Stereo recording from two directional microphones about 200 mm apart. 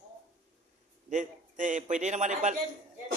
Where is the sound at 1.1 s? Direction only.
40° right (ahead or behind).